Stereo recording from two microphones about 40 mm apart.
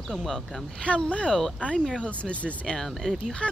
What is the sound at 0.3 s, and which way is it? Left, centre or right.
Speech, centre.